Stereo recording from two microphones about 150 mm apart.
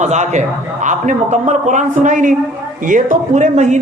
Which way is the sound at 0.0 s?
50° right (ahead or behind).